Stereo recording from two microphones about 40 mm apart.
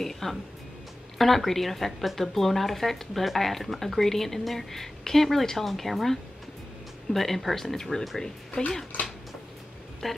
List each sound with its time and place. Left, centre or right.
0.0 s speech: centre
10.0 s speech: centre